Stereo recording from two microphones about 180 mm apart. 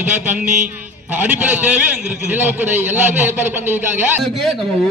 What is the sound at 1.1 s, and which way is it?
A man's voice, 10° right (ahead or behind).